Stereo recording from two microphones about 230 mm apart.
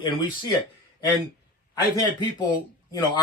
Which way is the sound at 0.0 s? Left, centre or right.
Left.